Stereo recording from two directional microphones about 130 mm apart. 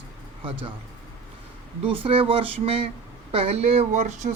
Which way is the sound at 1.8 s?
45° right (ahead or behind).